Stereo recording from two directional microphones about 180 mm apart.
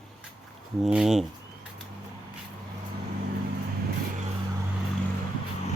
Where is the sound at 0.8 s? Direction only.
5° right (ahead or behind).